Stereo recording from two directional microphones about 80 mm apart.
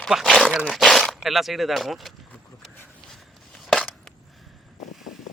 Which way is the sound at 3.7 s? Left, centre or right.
Centre.